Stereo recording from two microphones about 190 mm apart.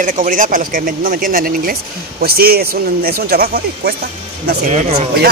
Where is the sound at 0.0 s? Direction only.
45° right (ahead or behind).